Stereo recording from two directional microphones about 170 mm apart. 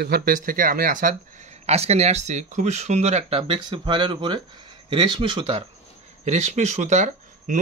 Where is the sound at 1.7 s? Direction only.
40° right (ahead or behind).